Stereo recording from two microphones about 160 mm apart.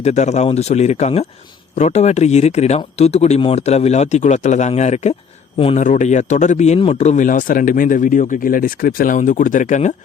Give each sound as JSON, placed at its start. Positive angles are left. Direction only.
{"t": 0.0, "sound": "a man's voice", "side_deg": 45}
{"t": 5.8, "sound": "speech", "side_deg": 50}